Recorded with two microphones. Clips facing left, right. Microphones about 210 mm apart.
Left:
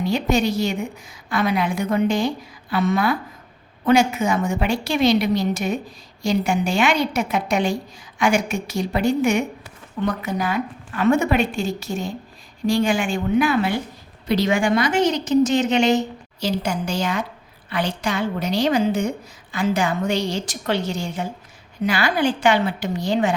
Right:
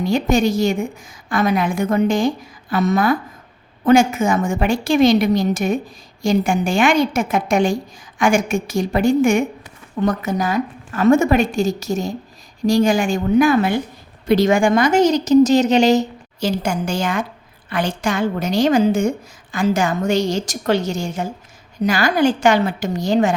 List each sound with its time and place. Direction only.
0.0 s a woman's voice: 45° right (ahead or behind)